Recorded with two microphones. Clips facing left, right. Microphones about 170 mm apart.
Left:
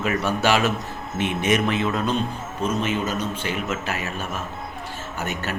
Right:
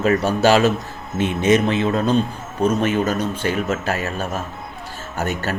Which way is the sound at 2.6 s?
45° right (ahead or behind).